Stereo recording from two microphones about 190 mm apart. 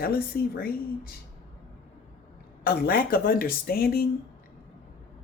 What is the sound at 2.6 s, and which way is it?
Speech, 50° left (ahead or behind).